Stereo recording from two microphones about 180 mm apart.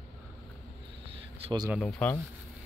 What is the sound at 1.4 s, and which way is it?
Speech, 25° right (ahead or behind).